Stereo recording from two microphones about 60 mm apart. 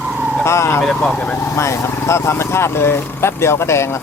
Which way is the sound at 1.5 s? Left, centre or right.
Left.